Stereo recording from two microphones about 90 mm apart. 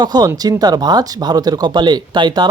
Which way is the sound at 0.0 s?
50° right (ahead or behind).